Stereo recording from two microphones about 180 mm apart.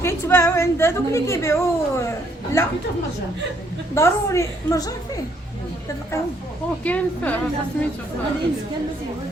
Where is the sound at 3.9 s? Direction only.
15° left (ahead or behind).